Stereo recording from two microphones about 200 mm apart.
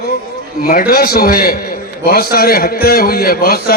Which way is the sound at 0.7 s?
45° left (ahead or behind).